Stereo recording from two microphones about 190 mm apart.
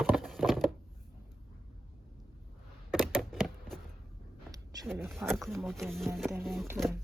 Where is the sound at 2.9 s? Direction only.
Centre (ahead or behind).